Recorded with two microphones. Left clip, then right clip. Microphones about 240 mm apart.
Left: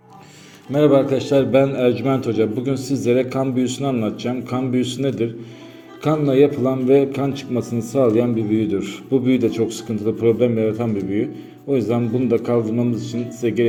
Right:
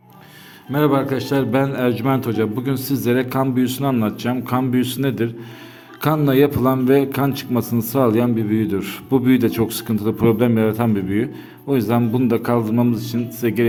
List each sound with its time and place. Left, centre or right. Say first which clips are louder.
0.7 s a man's voice: left 3 dB; centre